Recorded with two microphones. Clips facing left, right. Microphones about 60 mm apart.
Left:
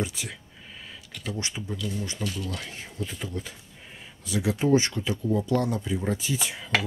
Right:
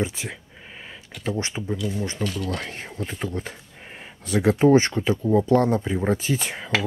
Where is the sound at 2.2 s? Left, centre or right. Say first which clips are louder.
Right 5 dB; right.